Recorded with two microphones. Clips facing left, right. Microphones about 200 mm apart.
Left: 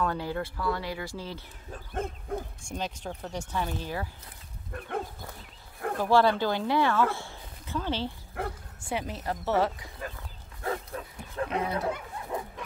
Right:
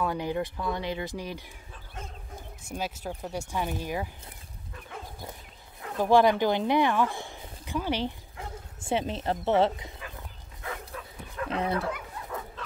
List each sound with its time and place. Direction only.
0.0 s speech: 15° right (ahead or behind)
1.7 s a sound: 55° left (ahead or behind)
2.7 s speech: 10° right (ahead or behind)
4.7 s dog: 55° left (ahead or behind)
5.9 s speech: 15° right (ahead or behind)
8.4 s bow-wow: 60° left (ahead or behind)
8.8 s a woman's voice: 25° right (ahead or behind)
10.6 s bow-wow: 35° left (ahead or behind)
11.7 s dog: 20° left (ahead or behind)